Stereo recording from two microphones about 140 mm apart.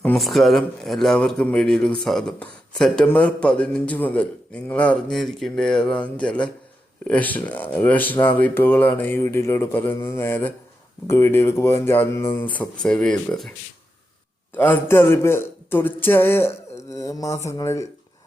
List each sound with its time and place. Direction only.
0.2 s speech: centre (ahead or behind)
14.5 s speech: 15° left (ahead or behind)